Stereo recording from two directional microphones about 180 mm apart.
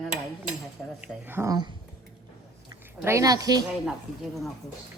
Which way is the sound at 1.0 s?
10° right (ahead or behind).